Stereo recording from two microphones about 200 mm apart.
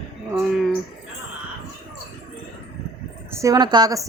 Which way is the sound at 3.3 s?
15° right (ahead or behind).